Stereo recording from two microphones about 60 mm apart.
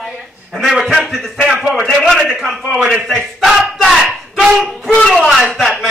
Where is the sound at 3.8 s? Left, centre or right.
Centre.